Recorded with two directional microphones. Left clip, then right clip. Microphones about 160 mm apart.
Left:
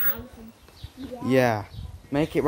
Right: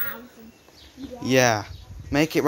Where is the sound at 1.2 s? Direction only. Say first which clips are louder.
Right 2 dB; centre (ahead or behind).